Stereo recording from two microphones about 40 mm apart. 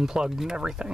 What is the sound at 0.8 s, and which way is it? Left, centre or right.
Speech, right.